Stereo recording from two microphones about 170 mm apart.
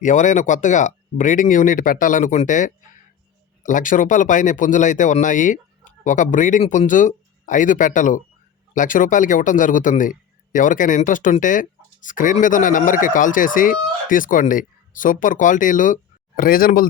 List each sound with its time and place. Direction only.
0.0 s a man's voice: 50° left (ahead or behind)